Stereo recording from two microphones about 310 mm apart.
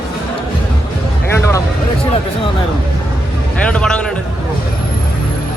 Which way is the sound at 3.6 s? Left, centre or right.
Centre.